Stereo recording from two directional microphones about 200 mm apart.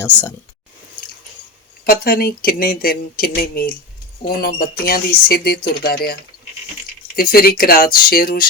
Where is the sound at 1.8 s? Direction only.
50° left (ahead or behind).